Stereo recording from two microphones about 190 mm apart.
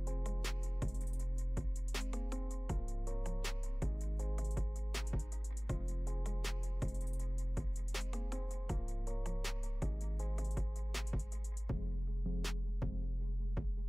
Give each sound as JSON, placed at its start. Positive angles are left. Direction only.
{"t": 0.0, "sound": "music", "side_deg": 0}